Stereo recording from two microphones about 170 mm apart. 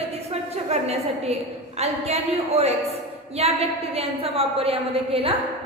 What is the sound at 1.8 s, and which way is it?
A woman's voice, 40° right (ahead or behind).